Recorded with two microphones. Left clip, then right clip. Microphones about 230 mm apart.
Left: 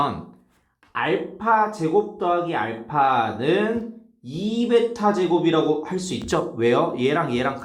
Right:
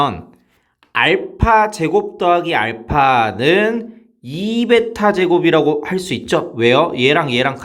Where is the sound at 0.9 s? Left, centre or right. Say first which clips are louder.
Right 9 dB; right.